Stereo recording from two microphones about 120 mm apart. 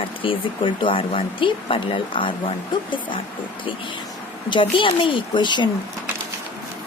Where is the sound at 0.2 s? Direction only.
45° left (ahead or behind).